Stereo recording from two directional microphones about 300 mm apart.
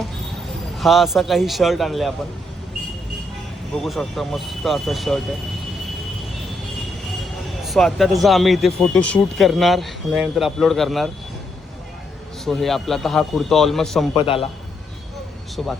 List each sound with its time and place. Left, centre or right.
0.8 s a man's voice: centre
3.8 s a man's voice: centre
7.6 s a man's voice: centre
12.5 s a man's voice: centre
14.2 s a man's voice: centre